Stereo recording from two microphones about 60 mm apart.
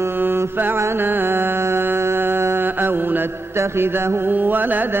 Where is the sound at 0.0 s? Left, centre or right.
Right.